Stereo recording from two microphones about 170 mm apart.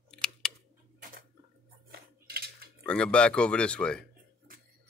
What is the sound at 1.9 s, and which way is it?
Cutlery, 65° right (ahead or behind).